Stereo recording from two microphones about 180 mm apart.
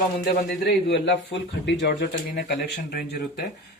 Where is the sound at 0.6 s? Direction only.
75° left (ahead or behind).